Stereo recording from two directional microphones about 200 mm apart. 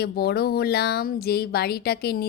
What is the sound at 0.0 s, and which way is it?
Speech, 50° left (ahead or behind).